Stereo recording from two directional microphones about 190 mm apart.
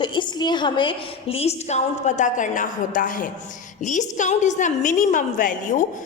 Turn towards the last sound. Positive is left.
turn(degrees=45)  # may be behind; listen again after turning